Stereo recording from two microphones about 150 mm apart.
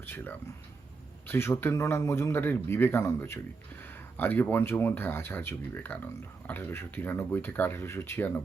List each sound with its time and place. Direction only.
0.0 s a man's voice: 15° left (ahead or behind)